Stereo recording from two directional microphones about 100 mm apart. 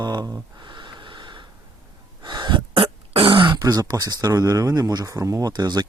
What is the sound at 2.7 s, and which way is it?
Throat clearing, 65° right (ahead or behind).